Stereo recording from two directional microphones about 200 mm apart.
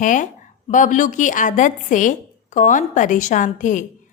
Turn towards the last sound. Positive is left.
turn(degrees=40)  # may be behind; listen again after turning